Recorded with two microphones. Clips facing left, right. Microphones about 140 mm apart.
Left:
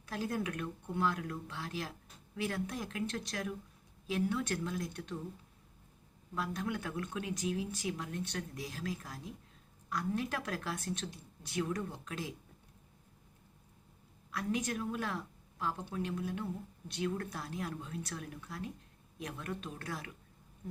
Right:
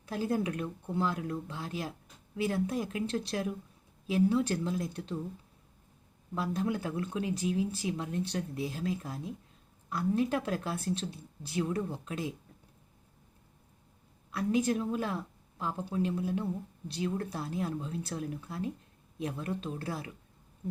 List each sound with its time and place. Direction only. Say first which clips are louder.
0.1 s speech: right 5 dB; 25° right (ahead or behind)
6.3 s speech: right 5 dB; 30° right (ahead or behind)
14.3 s speech: right 7 dB; 25° right (ahead or behind)